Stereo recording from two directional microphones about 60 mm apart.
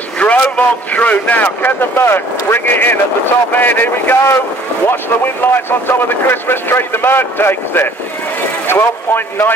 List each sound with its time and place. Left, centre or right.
0.2 s speech: left